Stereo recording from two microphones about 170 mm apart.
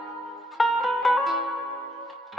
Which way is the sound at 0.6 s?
Centre (ahead or behind).